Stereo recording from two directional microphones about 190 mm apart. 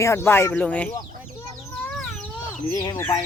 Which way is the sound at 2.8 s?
20° left (ahead or behind).